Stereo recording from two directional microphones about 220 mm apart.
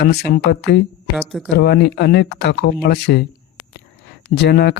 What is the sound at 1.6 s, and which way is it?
Speech, 50° left (ahead or behind).